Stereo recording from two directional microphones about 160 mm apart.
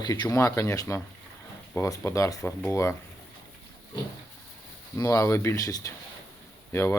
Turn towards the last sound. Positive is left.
turn(degrees=15)  # may be behind; listen again after turning